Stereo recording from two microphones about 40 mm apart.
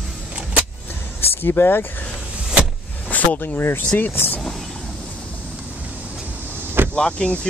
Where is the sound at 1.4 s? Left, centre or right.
Left.